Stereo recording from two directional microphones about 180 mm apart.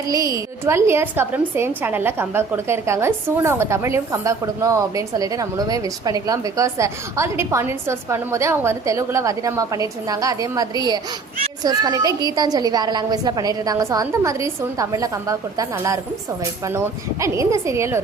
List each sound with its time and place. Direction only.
0.6 s a woman's voice: 15° right (ahead or behind)